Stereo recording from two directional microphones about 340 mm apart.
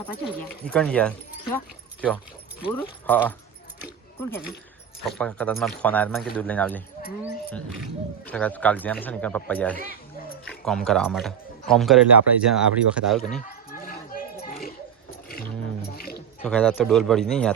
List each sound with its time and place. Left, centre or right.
0.0 s speech: centre
5.0 s speech: centre
8.3 s speech: centre
13.7 s a sound: left
16.4 s speech: centre